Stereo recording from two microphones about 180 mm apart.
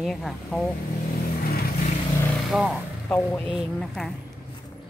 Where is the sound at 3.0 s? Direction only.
10° left (ahead or behind).